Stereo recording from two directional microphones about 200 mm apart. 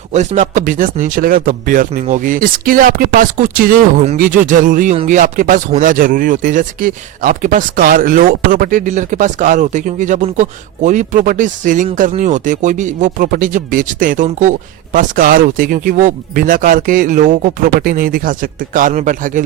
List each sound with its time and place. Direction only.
0.1 s speech: 35° right (ahead or behind)